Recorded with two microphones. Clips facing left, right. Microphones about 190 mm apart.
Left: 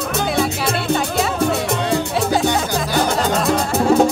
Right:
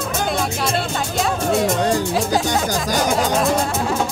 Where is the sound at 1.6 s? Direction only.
45° right (ahead or behind).